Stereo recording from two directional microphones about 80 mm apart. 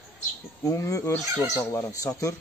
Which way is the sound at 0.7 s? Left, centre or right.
Left.